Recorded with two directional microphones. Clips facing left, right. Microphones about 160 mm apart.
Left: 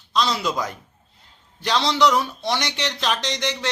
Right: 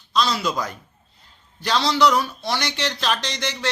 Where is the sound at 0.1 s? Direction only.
20° left (ahead or behind).